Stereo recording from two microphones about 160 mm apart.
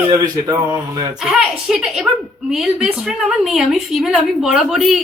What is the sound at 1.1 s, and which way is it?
A woman's voice, 5° right (ahead or behind).